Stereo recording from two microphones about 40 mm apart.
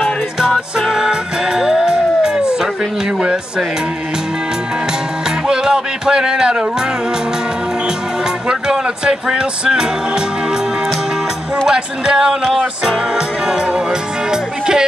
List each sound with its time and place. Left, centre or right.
0.7 s music: centre
3.2 s speech: right
5.5 s speech: centre
8.5 s speech: centre
11.6 s music: centre